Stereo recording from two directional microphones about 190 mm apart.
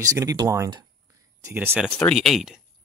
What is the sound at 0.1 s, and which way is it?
Speech, 15° right (ahead or behind).